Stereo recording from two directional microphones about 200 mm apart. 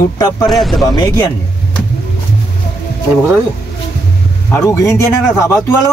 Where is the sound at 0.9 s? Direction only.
20° left (ahead or behind).